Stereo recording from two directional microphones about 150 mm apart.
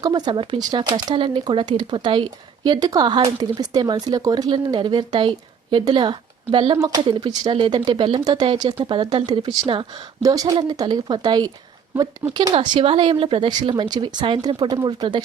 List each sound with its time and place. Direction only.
0.0 s speech: 30° right (ahead or behind)